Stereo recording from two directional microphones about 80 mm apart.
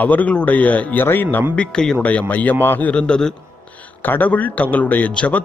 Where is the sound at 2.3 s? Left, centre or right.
Centre.